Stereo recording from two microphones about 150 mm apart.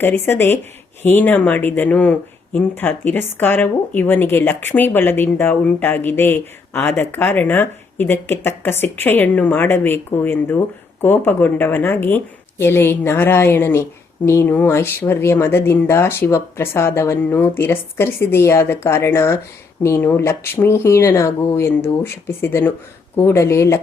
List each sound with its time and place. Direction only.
0.0 s speech: 15° left (ahead or behind)